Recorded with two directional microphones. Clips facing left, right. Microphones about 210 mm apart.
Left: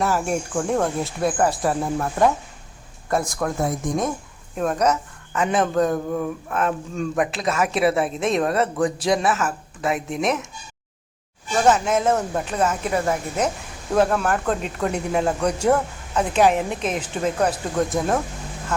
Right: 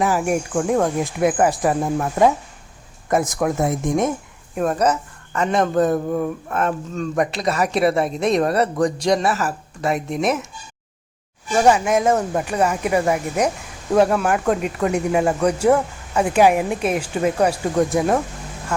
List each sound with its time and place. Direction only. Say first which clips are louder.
0.0 s speech: right 3 dB; 15° right (ahead or behind)
4.5 s speech: right 2 dB; 5° right (ahead or behind)
11.6 s speech: right 2 dB; 10° right (ahead or behind)